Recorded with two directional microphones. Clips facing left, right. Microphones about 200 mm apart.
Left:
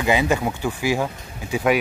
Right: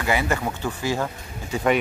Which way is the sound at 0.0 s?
15° left (ahead or behind).